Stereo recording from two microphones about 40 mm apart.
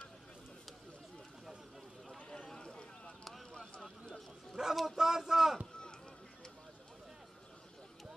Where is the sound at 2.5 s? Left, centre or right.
Centre.